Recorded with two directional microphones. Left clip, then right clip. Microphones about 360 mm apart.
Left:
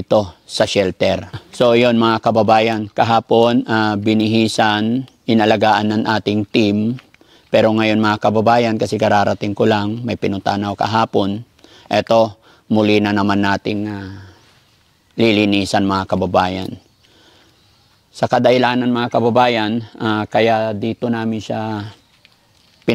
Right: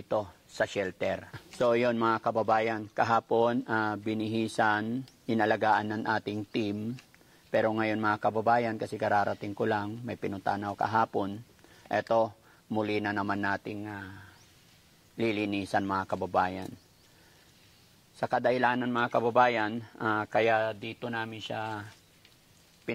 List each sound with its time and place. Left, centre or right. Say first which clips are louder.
0.1 s speech: left 16 dB; left
13.8 s speech: left 13 dB; left
15.1 s speech: left 16 dB; left
18.1 s a man's voice: left 15 dB; left